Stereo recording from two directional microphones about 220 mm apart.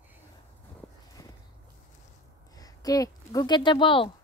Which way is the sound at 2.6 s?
15° left (ahead or behind).